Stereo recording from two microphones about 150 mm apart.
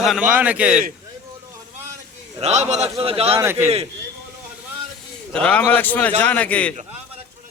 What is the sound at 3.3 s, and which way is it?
Speech, 15° right (ahead or behind).